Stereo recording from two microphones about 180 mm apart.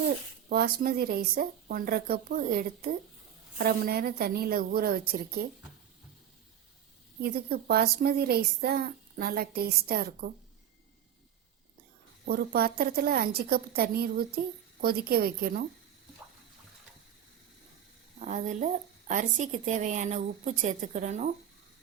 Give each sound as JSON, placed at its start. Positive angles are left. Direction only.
{"t": 0.5, "sound": "a woman's voice", "side_deg": -55}
{"t": 7.2, "sound": "a woman's voice", "side_deg": -60}
{"t": 12.2, "sound": "a woman's voice", "side_deg": -60}
{"t": 18.2, "sound": "a woman's voice", "side_deg": -45}